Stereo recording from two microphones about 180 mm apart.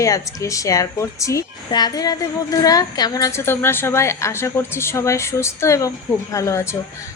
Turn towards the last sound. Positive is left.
turn(degrees=15)  # may be behind; listen again after turning